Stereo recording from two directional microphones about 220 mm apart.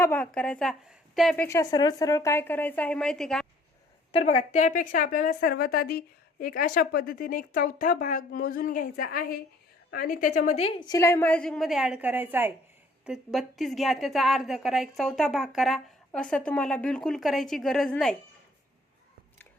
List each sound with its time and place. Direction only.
0.0 s a woman's voice: 5° left (ahead or behind)
1.5 s a woman's voice: 15° left (ahead or behind)
4.1 s a woman's voice: 25° left (ahead or behind); by 18.2 s 5° left (ahead or behind)